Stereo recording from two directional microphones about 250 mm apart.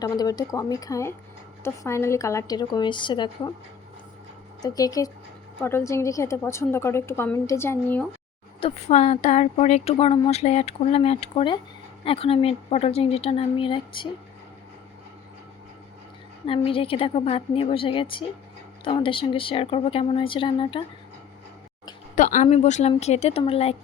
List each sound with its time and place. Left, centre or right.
0.0 s a woman's voice: centre
4.6 s a woman's voice: centre
8.6 s speech: left
16.5 s speech: left
22.1 s speech: left